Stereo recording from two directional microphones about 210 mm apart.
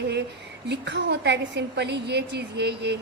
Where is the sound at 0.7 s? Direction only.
55° right (ahead or behind).